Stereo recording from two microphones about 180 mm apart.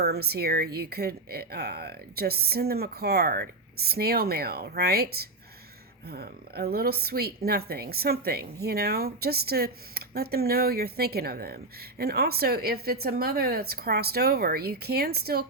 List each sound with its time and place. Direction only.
0.0 s a woman's voice: 60° right (ahead or behind)